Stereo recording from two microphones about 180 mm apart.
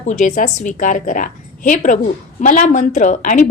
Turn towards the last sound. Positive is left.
turn(degrees=45)  # may be behind; listen again after turning